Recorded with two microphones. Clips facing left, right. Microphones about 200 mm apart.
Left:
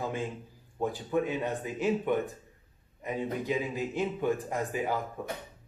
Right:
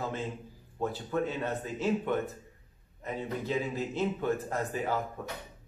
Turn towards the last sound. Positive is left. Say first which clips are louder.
# even
turn(degrees=10)  # may be behind; listen again after turning